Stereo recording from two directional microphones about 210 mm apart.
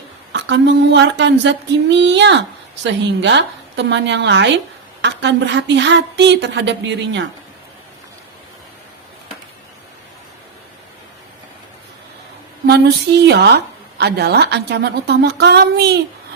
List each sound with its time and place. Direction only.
0.3 s a woman's voice: 55° right (ahead or behind)
12.6 s a woman's voice: 50° right (ahead or behind)